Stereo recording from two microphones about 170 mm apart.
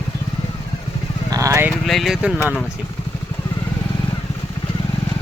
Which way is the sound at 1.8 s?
Centre (ahead or behind).